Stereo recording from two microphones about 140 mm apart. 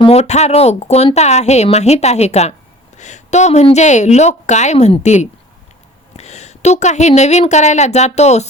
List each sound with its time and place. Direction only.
0.0 s a woman's voice: 50° left (ahead or behind)